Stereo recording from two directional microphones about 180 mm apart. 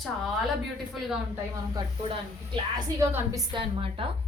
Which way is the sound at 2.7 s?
15° right (ahead or behind).